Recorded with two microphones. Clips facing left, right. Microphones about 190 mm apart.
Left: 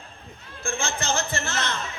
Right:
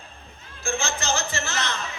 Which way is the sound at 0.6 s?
55° left (ahead or behind).